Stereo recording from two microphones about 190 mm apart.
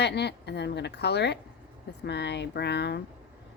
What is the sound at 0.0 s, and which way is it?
Speech, 60° left (ahead or behind).